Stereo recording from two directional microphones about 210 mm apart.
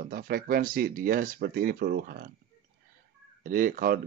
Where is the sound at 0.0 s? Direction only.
45° right (ahead or behind).